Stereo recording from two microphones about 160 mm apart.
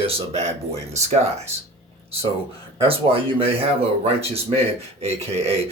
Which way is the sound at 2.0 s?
35° right (ahead or behind).